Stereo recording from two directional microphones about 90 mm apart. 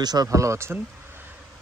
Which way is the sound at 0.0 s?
45° right (ahead or behind).